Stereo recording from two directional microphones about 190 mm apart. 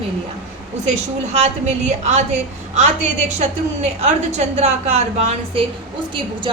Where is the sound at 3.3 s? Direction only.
35° right (ahead or behind).